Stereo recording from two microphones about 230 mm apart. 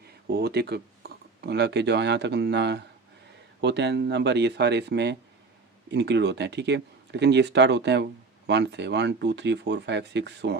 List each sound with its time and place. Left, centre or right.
0.3 s speech: right